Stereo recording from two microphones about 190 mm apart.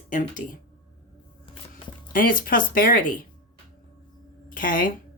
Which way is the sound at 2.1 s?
45° left (ahead or behind).